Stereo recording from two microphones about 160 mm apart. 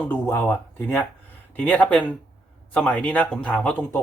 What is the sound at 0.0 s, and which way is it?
Speech, 15° left (ahead or behind).